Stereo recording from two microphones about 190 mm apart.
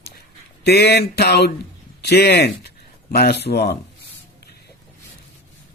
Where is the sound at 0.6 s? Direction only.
60° left (ahead or behind).